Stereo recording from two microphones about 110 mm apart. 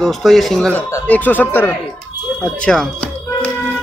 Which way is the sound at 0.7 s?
25° left (ahead or behind).